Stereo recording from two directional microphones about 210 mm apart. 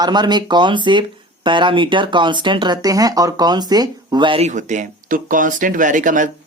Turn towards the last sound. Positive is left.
turn(degrees=-40)  # may be behind; listen again after turning